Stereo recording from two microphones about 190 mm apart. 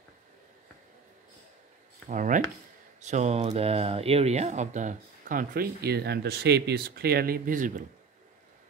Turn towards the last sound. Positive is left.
turn(degrees=-45)  # may be behind; listen again after turning